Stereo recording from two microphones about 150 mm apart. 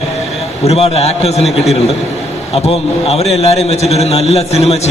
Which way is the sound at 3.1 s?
45° left (ahead or behind).